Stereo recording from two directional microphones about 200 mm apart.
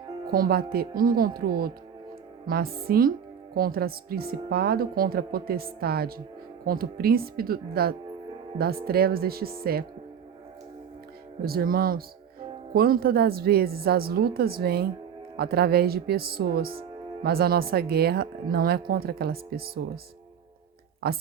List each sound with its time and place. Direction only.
0.3 s speech: 50° right (ahead or behind)
11.4 s speech: 50° right (ahead or behind)
21.0 s speech: 50° right (ahead or behind)